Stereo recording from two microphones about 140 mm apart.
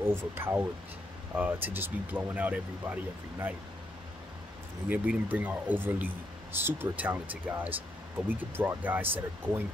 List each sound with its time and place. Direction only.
0.0 s speech: 15° right (ahead or behind)
4.8 s speech: 10° right (ahead or behind)